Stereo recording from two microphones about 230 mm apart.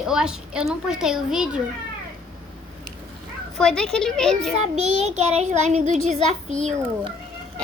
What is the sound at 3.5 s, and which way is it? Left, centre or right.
Speech, centre.